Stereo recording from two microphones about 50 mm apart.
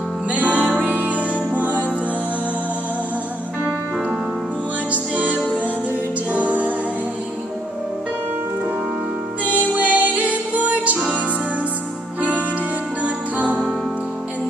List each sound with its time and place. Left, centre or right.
0.3 s music: right
4.9 s music: right
9.4 s music: right
12.2 s music: right